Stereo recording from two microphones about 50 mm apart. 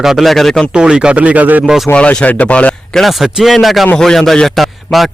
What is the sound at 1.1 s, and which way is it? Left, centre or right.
Speech, right.